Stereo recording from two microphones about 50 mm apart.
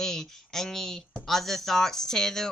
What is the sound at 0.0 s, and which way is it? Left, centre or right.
Speech, centre.